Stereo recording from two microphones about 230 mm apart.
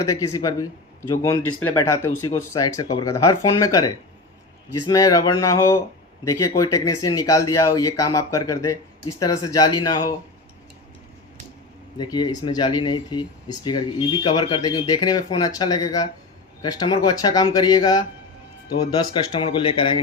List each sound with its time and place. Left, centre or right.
0.0 s speech: centre
11.9 s speech: centre